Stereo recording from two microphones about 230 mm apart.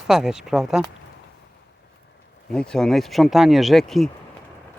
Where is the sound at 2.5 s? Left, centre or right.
Centre.